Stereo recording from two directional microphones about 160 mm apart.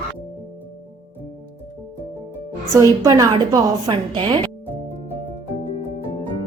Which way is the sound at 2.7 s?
20° right (ahead or behind).